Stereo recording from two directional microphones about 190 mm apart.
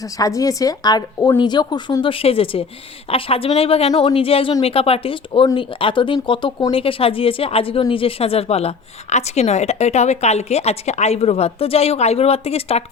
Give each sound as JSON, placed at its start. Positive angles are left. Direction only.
{"t": 0.0, "sound": "a woman's voice", "side_deg": 20}